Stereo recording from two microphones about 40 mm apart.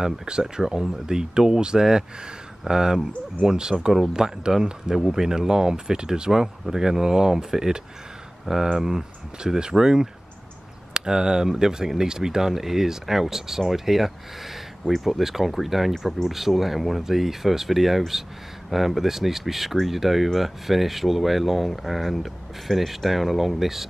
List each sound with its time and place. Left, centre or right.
0.0 s speech: centre